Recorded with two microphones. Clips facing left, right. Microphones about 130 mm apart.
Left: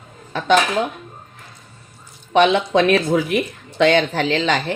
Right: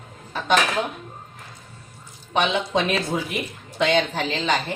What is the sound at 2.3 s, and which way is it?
Speech, 70° left (ahead or behind).